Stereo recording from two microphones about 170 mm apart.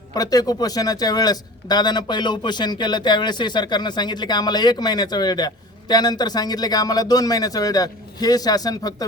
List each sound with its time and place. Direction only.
0.1 s a man's voice: 20° left (ahead or behind)